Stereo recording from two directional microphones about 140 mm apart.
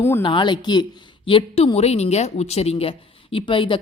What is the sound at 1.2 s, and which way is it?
A woman's voice, 45° left (ahead or behind).